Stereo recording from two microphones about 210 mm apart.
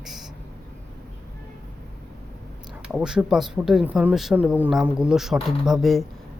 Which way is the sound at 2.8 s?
5° right (ahead or behind).